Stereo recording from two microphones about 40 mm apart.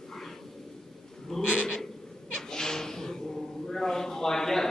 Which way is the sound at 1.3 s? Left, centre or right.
Centre.